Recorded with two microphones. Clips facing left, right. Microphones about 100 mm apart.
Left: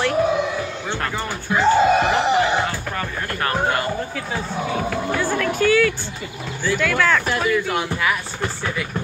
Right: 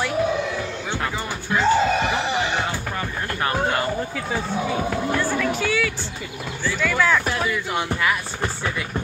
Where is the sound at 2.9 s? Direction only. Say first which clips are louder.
Left 1 dB; 20° right (ahead or behind).